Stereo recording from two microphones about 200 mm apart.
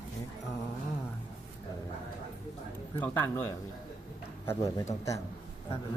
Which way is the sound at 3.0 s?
10° left (ahead or behind).